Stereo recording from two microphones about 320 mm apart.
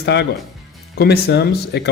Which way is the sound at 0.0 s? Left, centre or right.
Left.